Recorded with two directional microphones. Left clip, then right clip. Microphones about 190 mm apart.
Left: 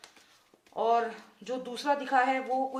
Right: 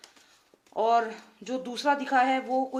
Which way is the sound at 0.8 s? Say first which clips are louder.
Right 3 dB; 40° right (ahead or behind).